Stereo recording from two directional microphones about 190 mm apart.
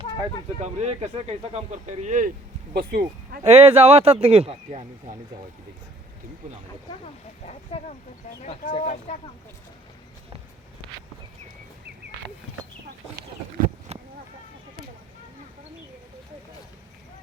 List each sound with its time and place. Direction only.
0.6 s speech: 35° right (ahead or behind)
2.7 s speech: 55° right (ahead or behind)
3.4 s speech: 30° right (ahead or behind)
7.0 s speech: 35° left (ahead or behind)
13.9 s a sound: 35° right (ahead or behind)